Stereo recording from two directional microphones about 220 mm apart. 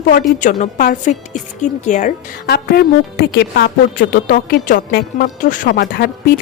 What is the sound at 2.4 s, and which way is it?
A woman's voice, 45° left (ahead or behind).